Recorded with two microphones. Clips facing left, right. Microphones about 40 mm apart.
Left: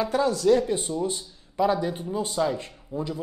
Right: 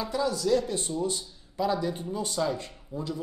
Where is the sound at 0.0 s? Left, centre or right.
Left.